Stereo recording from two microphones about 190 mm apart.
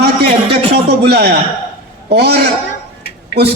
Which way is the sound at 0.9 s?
60° right (ahead or behind).